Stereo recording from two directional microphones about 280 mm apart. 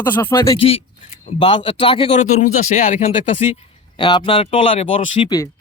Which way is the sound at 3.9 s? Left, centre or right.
Centre.